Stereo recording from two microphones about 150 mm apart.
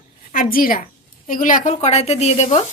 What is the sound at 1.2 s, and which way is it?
Speech, 60° left (ahead or behind).